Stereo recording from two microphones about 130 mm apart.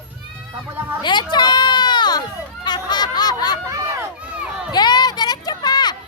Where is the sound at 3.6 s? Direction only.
25° right (ahead or behind).